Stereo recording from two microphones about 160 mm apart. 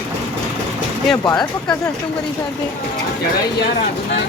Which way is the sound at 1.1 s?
25° left (ahead or behind).